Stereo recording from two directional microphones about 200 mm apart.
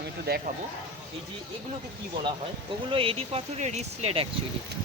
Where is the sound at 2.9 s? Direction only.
25° right (ahead or behind).